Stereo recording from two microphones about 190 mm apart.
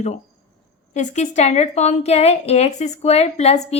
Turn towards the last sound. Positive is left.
turn(degrees=35)  # may be behind; listen again after turning